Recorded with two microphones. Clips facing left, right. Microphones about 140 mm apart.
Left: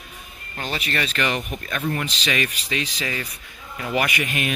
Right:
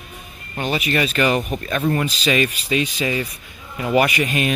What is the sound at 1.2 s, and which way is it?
Speech, 30° right (ahead or behind).